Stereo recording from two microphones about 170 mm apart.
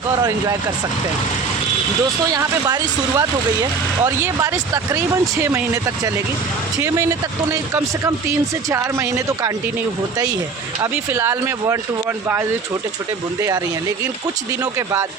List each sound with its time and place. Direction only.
0.2 s speech: 20° right (ahead or behind)
2.2 s speech: 20° right (ahead or behind)
10.8 s speech: 15° right (ahead or behind)
14.6 s speech: 15° right (ahead or behind)